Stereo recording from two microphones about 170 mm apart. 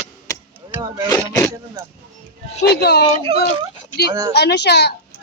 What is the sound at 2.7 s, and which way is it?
Speech, 70° left (ahead or behind).